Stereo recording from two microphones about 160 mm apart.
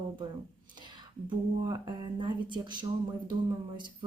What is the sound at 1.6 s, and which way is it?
Speech, 25° right (ahead or behind).